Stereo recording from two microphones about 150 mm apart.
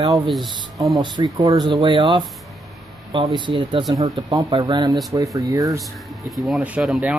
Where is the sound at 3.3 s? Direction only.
35° right (ahead or behind).